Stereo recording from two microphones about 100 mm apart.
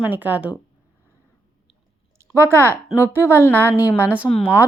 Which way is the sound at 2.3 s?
25° right (ahead or behind).